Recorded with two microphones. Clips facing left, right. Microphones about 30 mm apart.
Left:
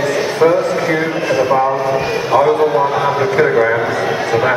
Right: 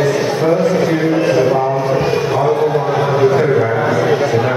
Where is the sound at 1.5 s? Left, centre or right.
Left.